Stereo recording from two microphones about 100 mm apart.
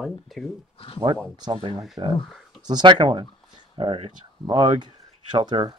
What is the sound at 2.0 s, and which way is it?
Speech, 45° right (ahead or behind).